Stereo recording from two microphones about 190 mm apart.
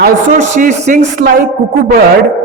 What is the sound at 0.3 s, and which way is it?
Speech, 40° right (ahead or behind).